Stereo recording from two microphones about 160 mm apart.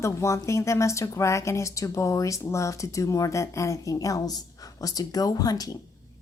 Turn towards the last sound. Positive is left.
turn(degrees=25)  # may be behind; listen again after turning